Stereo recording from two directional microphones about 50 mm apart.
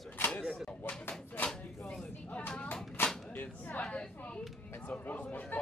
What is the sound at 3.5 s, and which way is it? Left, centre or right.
Chatter, left.